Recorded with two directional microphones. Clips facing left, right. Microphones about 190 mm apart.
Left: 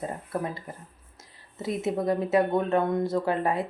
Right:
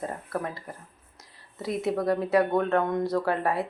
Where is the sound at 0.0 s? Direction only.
20° left (ahead or behind).